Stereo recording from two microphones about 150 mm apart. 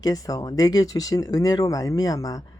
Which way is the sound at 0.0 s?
25° left (ahead or behind).